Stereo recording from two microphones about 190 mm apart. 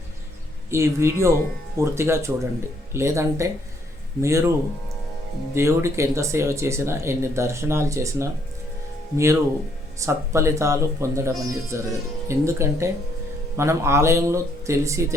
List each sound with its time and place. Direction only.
0.7 s speech: 15° right (ahead or behind)
5.5 s speech: 15° right (ahead or behind)